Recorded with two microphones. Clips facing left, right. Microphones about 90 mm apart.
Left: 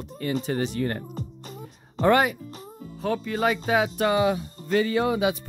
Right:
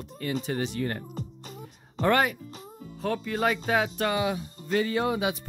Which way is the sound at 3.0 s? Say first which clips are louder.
Left 2 dB; 5° left (ahead or behind).